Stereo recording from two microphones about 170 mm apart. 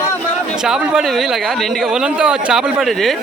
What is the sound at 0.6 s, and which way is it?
Speech, 5° right (ahead or behind).